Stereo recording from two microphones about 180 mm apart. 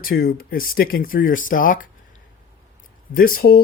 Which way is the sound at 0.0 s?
55° left (ahead or behind).